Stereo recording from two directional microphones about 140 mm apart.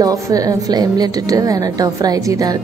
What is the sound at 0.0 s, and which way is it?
A woman's voice, 25° right (ahead or behind).